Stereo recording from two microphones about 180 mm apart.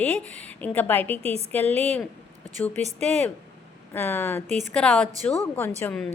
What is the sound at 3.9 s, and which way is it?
A woman's voice, 10° left (ahead or behind).